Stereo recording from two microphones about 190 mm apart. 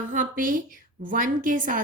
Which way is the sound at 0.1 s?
45° right (ahead or behind).